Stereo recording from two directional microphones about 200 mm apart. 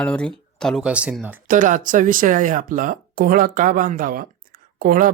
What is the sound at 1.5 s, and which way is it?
Speech, 40° right (ahead or behind).